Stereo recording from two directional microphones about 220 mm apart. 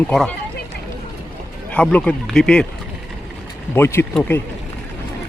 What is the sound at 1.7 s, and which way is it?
Speech, 5° left (ahead or behind).